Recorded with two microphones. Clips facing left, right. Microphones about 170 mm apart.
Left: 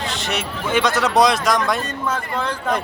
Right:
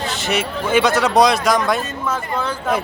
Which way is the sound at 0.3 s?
Centre (ahead or behind).